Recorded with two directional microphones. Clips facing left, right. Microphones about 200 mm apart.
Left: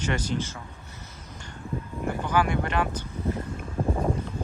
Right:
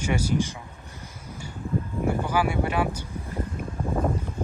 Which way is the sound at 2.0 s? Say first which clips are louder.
Even; 10° right (ahead or behind).